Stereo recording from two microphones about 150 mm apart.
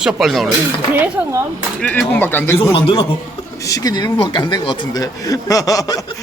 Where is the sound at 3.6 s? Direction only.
25° left (ahead or behind).